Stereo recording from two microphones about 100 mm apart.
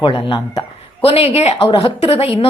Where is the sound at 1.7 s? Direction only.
70° left (ahead or behind).